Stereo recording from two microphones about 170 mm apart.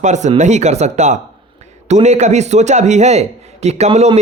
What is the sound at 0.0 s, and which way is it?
A man's voice, 45° right (ahead or behind).